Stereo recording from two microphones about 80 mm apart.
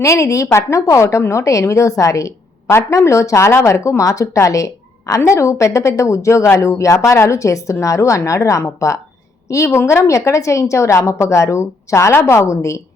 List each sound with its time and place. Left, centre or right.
0.0 s a woman's voice: left